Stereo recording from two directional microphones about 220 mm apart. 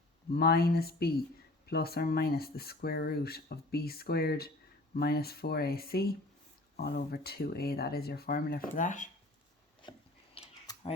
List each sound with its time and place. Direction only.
0.3 s speech: 45° left (ahead or behind)
10.3 s typing: 25° left (ahead or behind)